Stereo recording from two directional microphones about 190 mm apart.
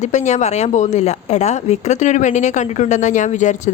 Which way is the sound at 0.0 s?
40° left (ahead or behind).